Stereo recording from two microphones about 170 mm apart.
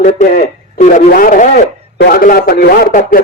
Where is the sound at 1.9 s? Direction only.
60° left (ahead or behind).